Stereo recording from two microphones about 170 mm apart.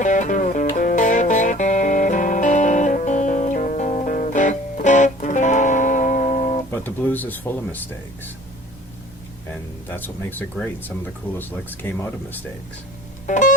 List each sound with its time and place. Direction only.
0.0 s music: 45° left (ahead or behind)
6.7 s speech: 10° left (ahead or behind)
9.9 s speech: 10° left (ahead or behind)
13.2 s music: 45° left (ahead or behind)